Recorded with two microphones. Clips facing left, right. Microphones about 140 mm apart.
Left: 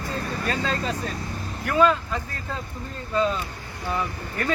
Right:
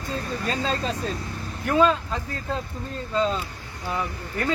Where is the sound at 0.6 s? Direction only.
20° right (ahead or behind).